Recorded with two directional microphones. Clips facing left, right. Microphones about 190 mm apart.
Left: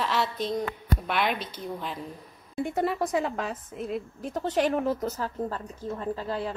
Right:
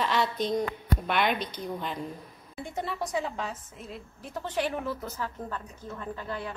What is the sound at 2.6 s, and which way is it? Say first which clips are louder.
A woman's voice: left 7 dB; 50° left (ahead or behind).